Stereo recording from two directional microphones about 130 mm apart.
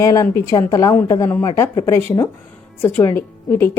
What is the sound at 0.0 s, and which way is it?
A woman's voice, 25° left (ahead or behind).